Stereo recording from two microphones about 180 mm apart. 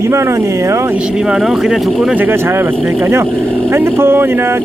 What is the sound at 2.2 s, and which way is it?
Speech, 15° right (ahead or behind).